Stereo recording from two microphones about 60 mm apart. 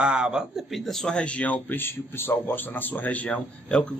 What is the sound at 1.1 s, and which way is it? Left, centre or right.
A man's voice, left.